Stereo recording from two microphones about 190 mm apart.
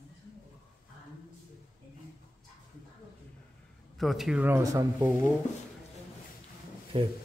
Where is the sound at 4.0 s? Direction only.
Centre (ahead or behind); by 5.3 s 15° right (ahead or behind).